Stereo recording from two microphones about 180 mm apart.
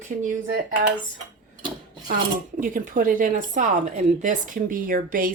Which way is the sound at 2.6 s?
50° right (ahead or behind).